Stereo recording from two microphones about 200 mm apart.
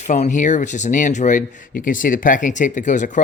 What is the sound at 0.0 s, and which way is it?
Speech, 35° left (ahead or behind).